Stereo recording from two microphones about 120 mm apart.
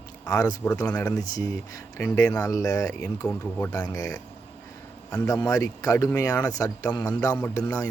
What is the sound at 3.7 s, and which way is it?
Speech, 30° left (ahead or behind).